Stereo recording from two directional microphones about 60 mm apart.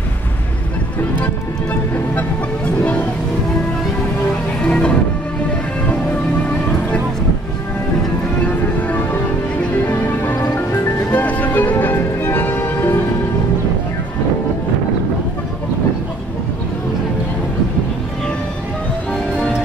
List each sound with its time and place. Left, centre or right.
1.2 s music: left
4.6 s music: left
8.8 s music: left